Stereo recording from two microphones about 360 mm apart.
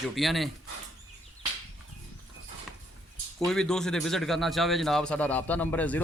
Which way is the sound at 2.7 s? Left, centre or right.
Centre.